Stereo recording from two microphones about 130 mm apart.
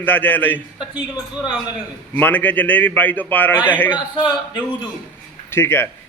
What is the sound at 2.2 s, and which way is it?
A man's voice, 15° left (ahead or behind).